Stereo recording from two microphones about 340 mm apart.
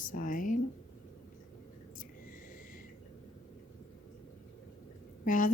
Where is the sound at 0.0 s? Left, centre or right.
Left.